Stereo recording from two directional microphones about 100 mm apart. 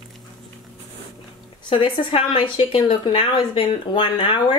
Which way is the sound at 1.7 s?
65° left (ahead or behind).